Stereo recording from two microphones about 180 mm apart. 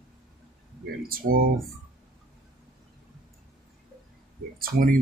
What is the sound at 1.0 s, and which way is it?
Speech, 55° right (ahead or behind).